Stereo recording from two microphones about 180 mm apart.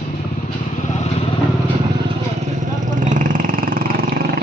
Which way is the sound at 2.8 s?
45° right (ahead or behind).